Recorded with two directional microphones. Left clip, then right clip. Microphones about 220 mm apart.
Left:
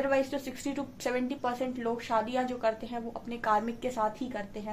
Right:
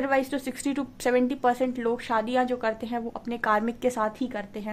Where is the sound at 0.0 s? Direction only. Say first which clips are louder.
Right 3 dB; 45° right (ahead or behind).